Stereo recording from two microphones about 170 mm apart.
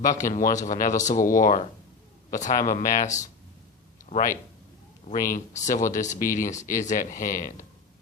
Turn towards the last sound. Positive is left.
turn(degrees=55)  # may be behind; listen again after turning